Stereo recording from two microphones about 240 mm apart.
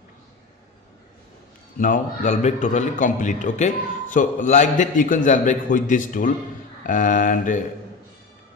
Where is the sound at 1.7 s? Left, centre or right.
Left.